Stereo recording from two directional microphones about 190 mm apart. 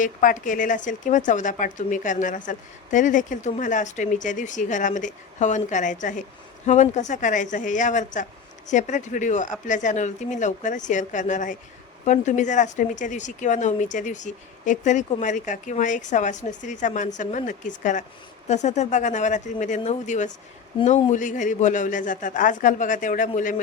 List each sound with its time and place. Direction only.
0.0 s a man's voice: 45° left (ahead or behind)